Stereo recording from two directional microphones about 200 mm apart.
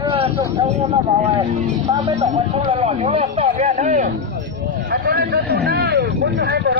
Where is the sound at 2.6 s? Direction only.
25° right (ahead or behind).